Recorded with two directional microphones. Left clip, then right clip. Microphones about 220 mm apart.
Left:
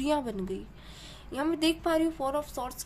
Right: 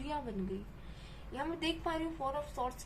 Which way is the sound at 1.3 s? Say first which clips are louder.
Left 9 dB; 50° left (ahead or behind).